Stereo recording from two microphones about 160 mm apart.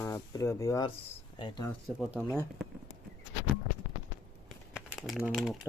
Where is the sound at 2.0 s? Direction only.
Centre (ahead or behind).